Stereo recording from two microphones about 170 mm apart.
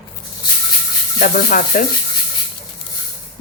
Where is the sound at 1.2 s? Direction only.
50° left (ahead or behind).